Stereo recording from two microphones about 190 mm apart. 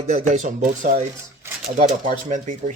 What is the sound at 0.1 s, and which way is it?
Speech, 40° right (ahead or behind).